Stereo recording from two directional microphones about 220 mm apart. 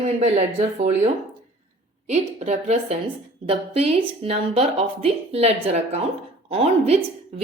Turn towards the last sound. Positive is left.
turn(degrees=-30)  # may be behind; listen again after turning